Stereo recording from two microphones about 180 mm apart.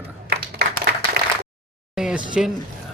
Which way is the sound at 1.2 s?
60° right (ahead or behind).